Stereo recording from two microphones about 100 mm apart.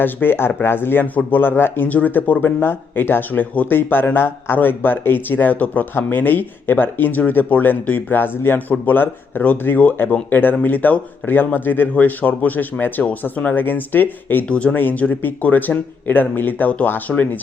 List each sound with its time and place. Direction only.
0.0 s speech: 20° left (ahead or behind)